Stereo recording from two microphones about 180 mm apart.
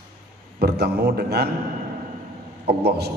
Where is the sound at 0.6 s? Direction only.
65° right (ahead or behind).